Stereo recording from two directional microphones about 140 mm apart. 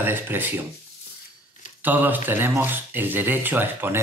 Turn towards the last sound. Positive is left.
turn(degrees=-15)  # may be behind; listen again after turning